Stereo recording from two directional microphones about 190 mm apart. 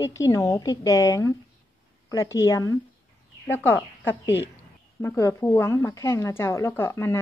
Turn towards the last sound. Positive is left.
turn(degrees=15)  # may be behind; listen again after turning